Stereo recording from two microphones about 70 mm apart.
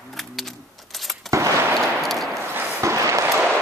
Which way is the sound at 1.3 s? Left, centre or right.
Right.